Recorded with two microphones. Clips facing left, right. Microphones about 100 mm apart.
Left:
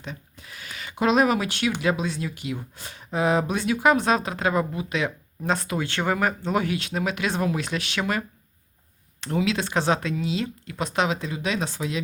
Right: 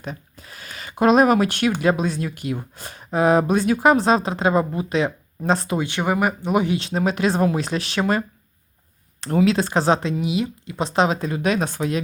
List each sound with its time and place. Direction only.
0.0 s speech: 40° right (ahead or behind)
3.8 s speech: 30° right (ahead or behind)
5.8 s speech: 15° right (ahead or behind); by 8.2 s 35° right (ahead or behind)
9.2 s speech: 40° right (ahead or behind); by 10.8 s 15° right (ahead or behind)
10.8 s speech: 30° right (ahead or behind)
11.3 s speech: 50° right (ahead or behind)